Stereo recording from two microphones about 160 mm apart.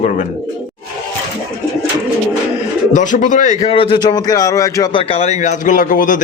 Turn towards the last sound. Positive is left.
turn(degrees=55)  # may be behind; listen again after turning